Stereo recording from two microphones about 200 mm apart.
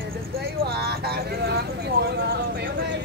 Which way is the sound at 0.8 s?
55° right (ahead or behind).